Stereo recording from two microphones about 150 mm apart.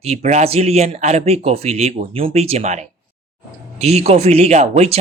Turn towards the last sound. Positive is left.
turn(degrees=-45)  # may be behind; listen again after turning